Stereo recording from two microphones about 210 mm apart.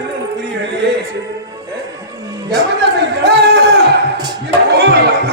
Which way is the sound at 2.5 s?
55° right (ahead or behind).